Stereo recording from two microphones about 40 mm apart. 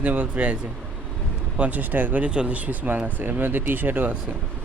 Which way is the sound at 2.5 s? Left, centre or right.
Right.